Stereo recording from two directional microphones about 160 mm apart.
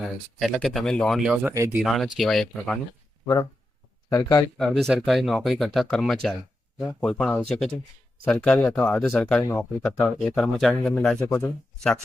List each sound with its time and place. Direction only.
0.3 s speech: centre (ahead or behind)
1.5 s speech: 20° right (ahead or behind)
1.8 s speech: centre (ahead or behind)
4.1 s speech: 25° left (ahead or behind)
4.5 s speech: 5° left (ahead or behind)
9.4 s speech: 15° left (ahead or behind)